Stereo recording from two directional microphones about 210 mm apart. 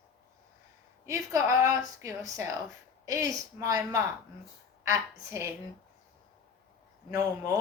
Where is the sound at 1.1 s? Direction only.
15° right (ahead or behind).